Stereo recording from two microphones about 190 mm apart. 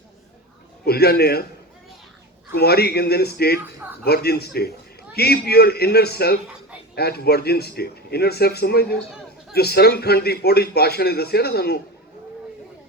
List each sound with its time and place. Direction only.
0.9 s a man's voice: 55° left (ahead or behind)
2.6 s a man's voice: 55° left (ahead or behind)